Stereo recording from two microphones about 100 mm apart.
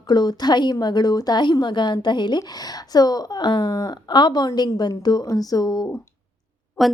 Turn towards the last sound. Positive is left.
turn(degrees=0)  # may be behind; listen again after turning